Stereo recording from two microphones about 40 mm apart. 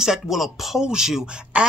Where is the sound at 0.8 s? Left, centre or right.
Centre.